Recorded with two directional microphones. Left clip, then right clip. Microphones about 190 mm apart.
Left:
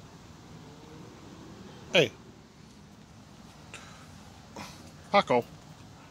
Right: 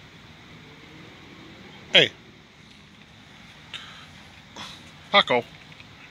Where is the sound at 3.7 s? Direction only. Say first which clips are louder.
Right 9 dB; 20° left (ahead or behind).